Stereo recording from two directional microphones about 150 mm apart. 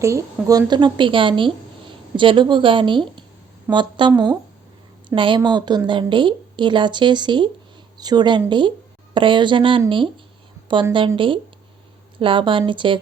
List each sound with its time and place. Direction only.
0.0 s a woman's voice: 20° right (ahead or behind)
0.7 s a woman's voice: 30° right (ahead or behind)
12.2 s a woman's voice: 35° right (ahead or behind)